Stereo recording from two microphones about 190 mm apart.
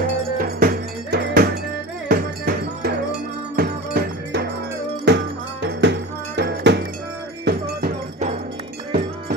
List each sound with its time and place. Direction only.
0.0 s music: 45° right (ahead or behind); by 6.8 s 65° right (ahead or behind)
7.4 s cowbell: 55° right (ahead or behind)